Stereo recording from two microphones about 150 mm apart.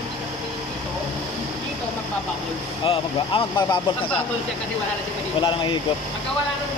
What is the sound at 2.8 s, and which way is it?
Speech, 35° left (ahead or behind).